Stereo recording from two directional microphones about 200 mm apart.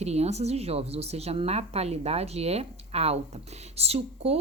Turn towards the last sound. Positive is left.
turn(degrees=-30)  # may be behind; listen again after turning